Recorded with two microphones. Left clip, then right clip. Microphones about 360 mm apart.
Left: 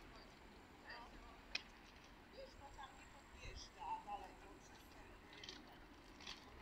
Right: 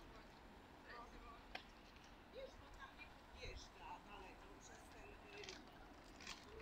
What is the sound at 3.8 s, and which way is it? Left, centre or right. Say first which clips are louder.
Vehicle: left 9 dB; centre.